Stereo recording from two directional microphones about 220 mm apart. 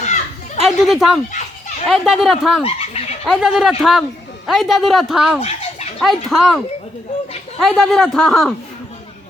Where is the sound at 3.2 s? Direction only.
5° right (ahead or behind).